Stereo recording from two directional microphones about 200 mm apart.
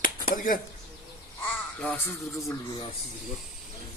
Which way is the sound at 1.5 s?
10° left (ahead or behind).